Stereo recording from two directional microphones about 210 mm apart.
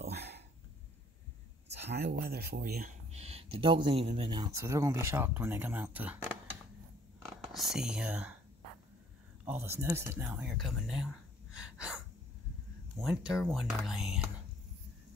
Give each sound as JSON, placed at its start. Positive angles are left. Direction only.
{"t": 0.1, "sound": "a sound", "side_deg": -50}
{"t": 1.7, "sound": "a sound", "side_deg": -55}
{"t": 2.2, "sound": "speech", "side_deg": -50}
{"t": 3.1, "sound": "a sound", "side_deg": -30}
{"t": 3.6, "sound": "speech", "side_deg": -25}
{"t": 7.4, "sound": "speech", "side_deg": 0}
{"t": 9.4, "sound": "speech", "side_deg": -10}
{"t": 11.5, "sound": "gasp", "side_deg": -5}
{"t": 13.0, "sound": "speech", "side_deg": -5}